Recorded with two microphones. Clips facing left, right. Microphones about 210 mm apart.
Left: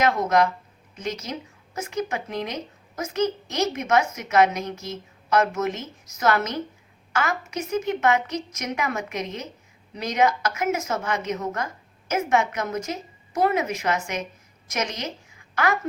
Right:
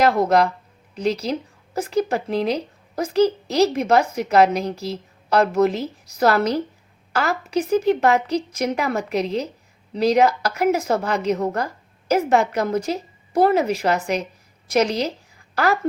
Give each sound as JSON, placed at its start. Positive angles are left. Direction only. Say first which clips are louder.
{"t": 0.0, "sound": "a woman's voice", "louder": "right 4 dB", "side_deg": -35}